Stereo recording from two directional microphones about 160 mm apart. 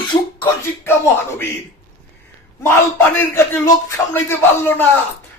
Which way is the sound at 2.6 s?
15° left (ahead or behind).